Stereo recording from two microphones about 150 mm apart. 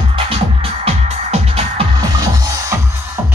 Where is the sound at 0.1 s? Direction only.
40° right (ahead or behind).